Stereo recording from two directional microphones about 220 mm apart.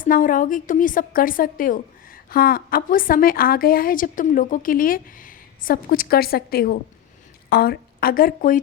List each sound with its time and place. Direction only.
0.0 s a woman's voice: 40° left (ahead or behind)